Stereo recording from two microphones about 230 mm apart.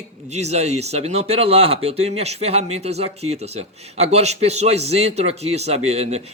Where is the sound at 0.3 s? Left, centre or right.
Right.